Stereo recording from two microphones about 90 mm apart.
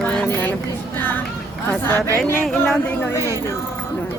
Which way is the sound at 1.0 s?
20° left (ahead or behind).